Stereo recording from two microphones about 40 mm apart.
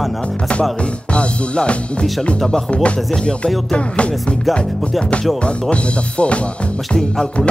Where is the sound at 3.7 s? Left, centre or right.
Left.